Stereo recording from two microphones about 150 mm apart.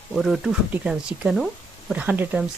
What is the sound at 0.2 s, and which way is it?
Speech, centre (ahead or behind).